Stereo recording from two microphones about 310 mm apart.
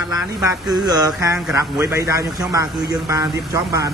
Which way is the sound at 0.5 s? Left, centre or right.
Centre.